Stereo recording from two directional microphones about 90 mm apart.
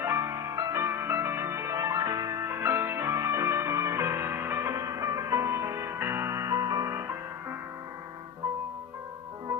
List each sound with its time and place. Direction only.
0.0 s music: 30° right (ahead or behind)